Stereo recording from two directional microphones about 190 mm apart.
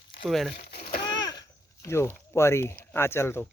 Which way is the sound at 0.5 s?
55° left (ahead or behind).